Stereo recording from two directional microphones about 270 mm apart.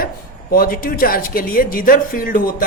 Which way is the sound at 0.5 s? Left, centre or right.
Left.